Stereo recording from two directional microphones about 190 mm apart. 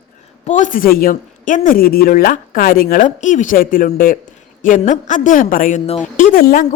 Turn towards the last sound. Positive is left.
turn(degrees=50)  # may be behind; listen again after turning